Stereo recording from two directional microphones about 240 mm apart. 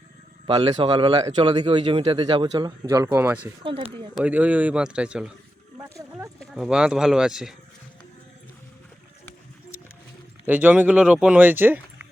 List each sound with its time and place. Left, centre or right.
0.4 s speech: right; by 3.5 s centre
3.6 s speech: right
4.2 s speech: centre
5.9 s horse: centre
6.4 s speech: centre
10.4 s speech: centre